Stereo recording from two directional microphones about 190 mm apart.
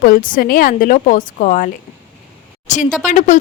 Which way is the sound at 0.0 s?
45° left (ahead or behind).